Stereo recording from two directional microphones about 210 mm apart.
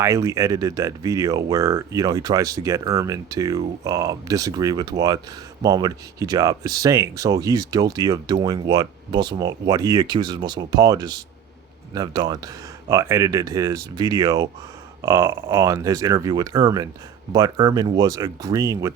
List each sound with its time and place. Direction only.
0.0 s speech: 15° right (ahead or behind)